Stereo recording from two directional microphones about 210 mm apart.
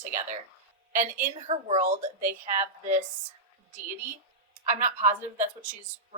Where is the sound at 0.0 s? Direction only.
35° right (ahead or behind).